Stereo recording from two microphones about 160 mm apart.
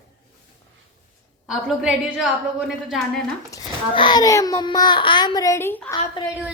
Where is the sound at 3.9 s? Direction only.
30° left (ahead or behind); by 5.9 s 10° left (ahead or behind).